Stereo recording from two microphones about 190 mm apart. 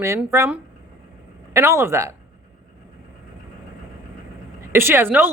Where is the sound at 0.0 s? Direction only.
15° right (ahead or behind).